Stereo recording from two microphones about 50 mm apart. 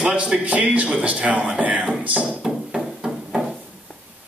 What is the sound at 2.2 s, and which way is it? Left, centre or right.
Hammer, centre.